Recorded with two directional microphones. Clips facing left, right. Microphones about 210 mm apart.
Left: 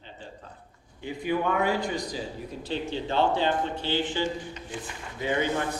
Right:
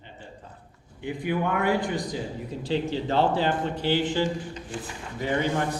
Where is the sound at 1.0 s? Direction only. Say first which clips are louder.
Even; 15° right (ahead or behind).